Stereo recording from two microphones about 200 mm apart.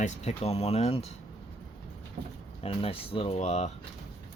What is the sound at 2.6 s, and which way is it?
Speech, 30° left (ahead or behind).